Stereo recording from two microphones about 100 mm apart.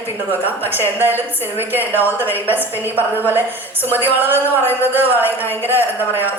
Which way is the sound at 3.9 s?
20° right (ahead or behind).